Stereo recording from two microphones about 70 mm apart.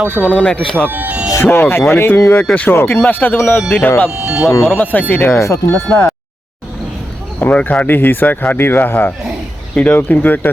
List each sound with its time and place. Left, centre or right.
0.3 s speech: centre
0.9 s speech: right
1.5 s speech: left
4.1 s speech: centre
4.4 s speech: left
5.4 s speech: left
7.3 s speech: left